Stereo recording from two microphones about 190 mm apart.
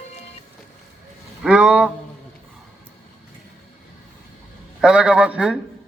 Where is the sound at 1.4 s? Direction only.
5° right (ahead or behind).